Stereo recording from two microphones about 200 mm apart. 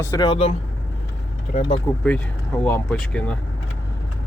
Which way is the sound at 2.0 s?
5° left (ahead or behind).